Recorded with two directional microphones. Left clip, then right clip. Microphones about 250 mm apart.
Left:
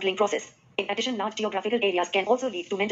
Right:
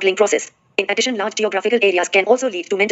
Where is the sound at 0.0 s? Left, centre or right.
Right.